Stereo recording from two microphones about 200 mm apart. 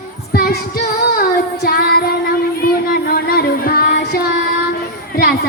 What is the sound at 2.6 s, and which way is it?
Music, 45° left (ahead or behind).